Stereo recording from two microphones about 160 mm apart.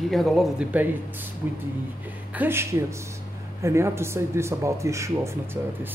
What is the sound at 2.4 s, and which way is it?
Speech, 15° right (ahead or behind).